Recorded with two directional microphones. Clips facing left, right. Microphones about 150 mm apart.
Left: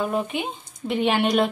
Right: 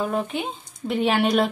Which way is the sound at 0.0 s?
5° left (ahead or behind).